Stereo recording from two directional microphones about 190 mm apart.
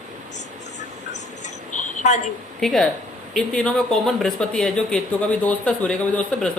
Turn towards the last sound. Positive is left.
turn(degrees=5)  # may be behind; listen again after turning